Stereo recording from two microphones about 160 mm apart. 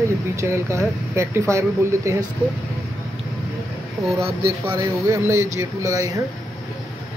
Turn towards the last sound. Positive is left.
turn(degrees=-20)  # may be behind; listen again after turning